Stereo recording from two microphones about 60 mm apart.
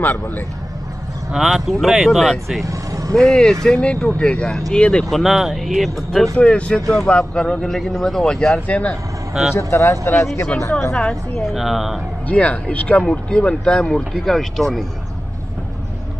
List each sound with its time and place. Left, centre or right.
0.0 s speech: left
1.3 s speech: centre
2.6 s vehicle: right
3.2 s speech: centre
5.1 s speech: centre
6.3 s speech: centre
8.6 s speech: left
9.3 s speech: centre
9.6 s speech: left
11.0 s speech: centre
11.4 s speech: centre
12.3 s speech: left; by 14.9 s centre